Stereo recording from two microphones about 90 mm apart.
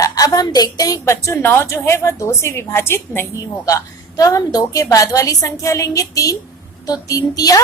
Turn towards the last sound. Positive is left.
turn(degrees=40)  # may be behind; listen again after turning